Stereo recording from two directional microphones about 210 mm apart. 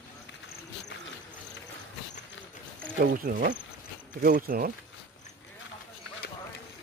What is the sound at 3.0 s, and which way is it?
Speech, 40° right (ahead or behind).